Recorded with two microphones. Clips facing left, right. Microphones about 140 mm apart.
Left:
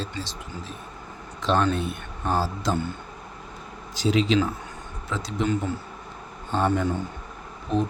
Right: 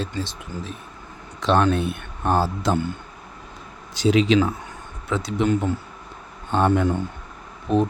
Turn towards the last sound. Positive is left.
turn(degrees=-55)  # may be behind; listen again after turning